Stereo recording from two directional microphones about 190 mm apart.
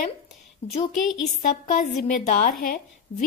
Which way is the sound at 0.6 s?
30° left (ahead or behind).